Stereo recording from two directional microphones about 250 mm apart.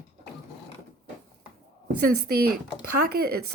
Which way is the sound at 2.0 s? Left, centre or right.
Right.